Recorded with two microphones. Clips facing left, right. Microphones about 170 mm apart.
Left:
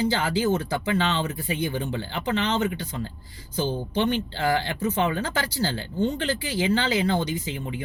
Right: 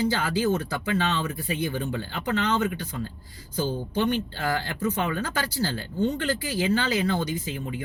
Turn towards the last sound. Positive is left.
turn(degrees=25)  # may be behind; listen again after turning